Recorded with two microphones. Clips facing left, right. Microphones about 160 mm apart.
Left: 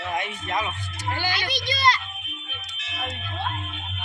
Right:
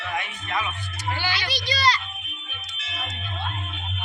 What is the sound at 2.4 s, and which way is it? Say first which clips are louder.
Music: even; 10° left (ahead or behind).